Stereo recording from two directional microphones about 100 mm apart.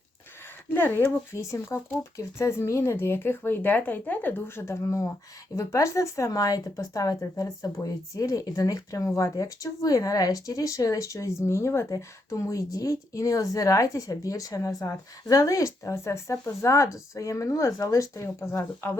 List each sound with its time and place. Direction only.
0.7 s speech: 20° left (ahead or behind)